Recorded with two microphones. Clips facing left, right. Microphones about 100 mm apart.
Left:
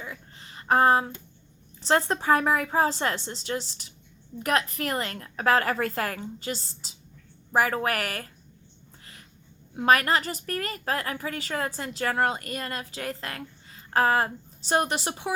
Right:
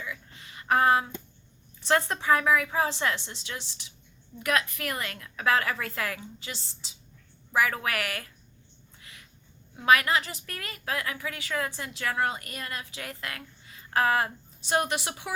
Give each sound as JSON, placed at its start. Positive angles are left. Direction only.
{"t": 0.0, "sound": "a sound", "side_deg": 40}
{"t": 1.8, "sound": "a woman's voice", "side_deg": 30}
{"t": 9.7, "sound": "a woman's voice", "side_deg": 45}